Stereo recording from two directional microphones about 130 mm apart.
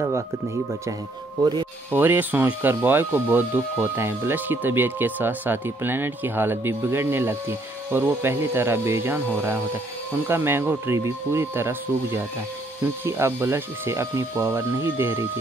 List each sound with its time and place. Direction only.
1.4 s speech: 35° right (ahead or behind)
1.9 s speech: 15° right (ahead or behind)